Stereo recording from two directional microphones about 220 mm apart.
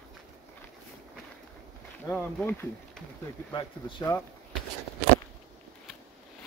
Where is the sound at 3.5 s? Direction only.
15° left (ahead or behind).